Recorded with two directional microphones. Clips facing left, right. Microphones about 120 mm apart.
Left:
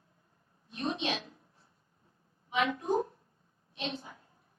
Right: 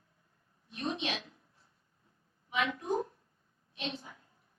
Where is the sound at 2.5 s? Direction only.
25° left (ahead or behind).